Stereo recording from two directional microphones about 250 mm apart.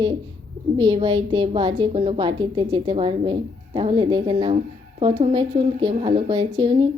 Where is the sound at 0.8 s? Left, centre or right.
Centre.